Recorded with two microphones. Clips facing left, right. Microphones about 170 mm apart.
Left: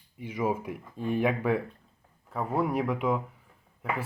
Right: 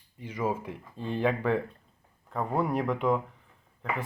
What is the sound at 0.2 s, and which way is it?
Speech, 10° left (ahead or behind).